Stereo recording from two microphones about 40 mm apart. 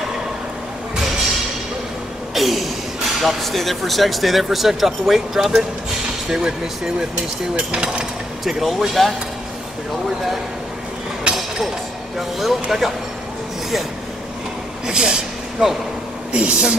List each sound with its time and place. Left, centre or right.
2.3 s a sound: centre
3.2 s speech: centre
8.5 s speech: centre
12.2 s speech: centre
14.9 s a sound: centre
16.3 s speech: right